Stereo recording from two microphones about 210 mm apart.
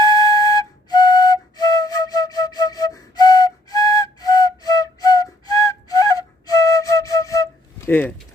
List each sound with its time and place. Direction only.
0.0 s flute: 15° left (ahead or behind)
7.9 s speech: 10° left (ahead or behind)